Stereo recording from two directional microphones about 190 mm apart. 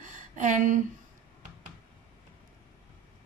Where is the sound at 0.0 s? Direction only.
40° right (ahead or behind).